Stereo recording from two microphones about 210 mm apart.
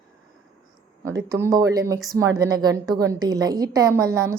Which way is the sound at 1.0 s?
15° right (ahead or behind).